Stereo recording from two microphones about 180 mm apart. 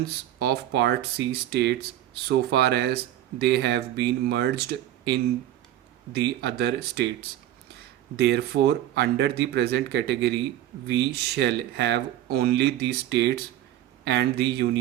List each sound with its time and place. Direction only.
0.3 s speech: 65° right (ahead or behind)